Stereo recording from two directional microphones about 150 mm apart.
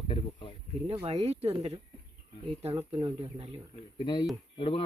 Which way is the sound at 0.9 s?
40° right (ahead or behind).